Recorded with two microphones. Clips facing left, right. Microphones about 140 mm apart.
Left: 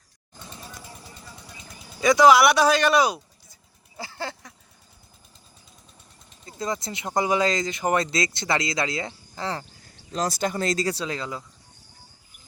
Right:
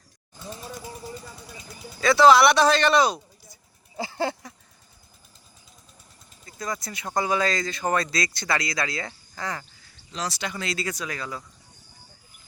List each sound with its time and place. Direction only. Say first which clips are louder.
2.0 s speech: even; 15° left (ahead or behind)
3.9 s a sound: right 6 dB; 15° right (ahead or behind)
6.4 s speech: left 3 dB; 25° left (ahead or behind)
10.1 s speech: left 6 dB; 45° left (ahead or behind); by 11.4 s 20° left (ahead or behind)